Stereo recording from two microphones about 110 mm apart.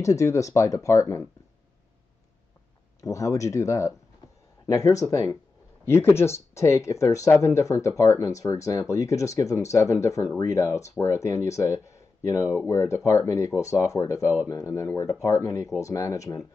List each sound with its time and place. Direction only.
0.0 s speech: 30° left (ahead or behind)
3.0 s speech: 30° left (ahead or behind)